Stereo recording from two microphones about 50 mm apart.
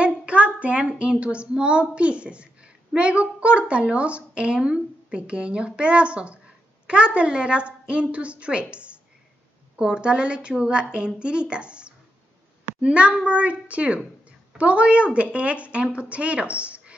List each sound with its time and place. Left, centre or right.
0.0 s speech: right